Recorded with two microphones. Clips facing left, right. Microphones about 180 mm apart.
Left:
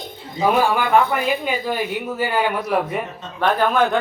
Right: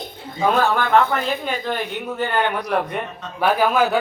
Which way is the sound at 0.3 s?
10° left (ahead or behind).